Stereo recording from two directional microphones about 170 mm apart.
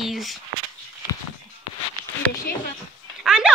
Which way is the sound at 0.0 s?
Centre (ahead or behind).